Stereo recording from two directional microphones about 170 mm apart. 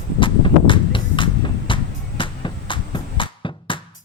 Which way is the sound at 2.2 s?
30° left (ahead or behind).